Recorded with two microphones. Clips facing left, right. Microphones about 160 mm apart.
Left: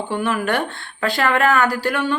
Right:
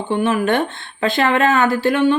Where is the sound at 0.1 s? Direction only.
20° right (ahead or behind).